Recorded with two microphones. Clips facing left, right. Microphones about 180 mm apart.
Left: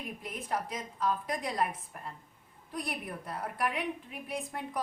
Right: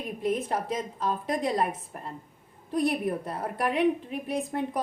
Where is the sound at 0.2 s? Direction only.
25° right (ahead or behind).